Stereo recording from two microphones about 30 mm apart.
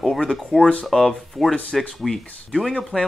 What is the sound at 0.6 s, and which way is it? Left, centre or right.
Speech, left.